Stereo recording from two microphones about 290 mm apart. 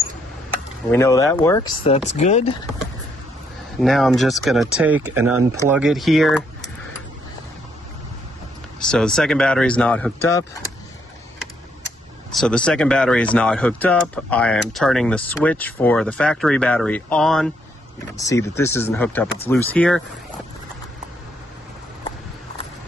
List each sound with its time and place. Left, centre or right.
0.9 s speech: centre
3.8 s speech: centre
5.1 s speech: right
5.7 s speech: centre
8.7 s speech: centre
12.3 s speech: centre